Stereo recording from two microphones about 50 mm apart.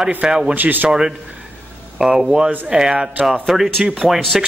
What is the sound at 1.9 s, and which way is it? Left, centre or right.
Speech, centre.